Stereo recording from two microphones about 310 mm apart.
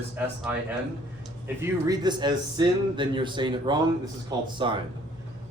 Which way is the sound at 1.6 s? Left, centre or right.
Centre.